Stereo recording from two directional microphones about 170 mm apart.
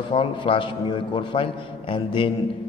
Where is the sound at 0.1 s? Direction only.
30° left (ahead or behind).